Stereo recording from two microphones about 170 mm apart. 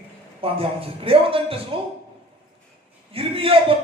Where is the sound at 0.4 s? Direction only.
30° right (ahead or behind).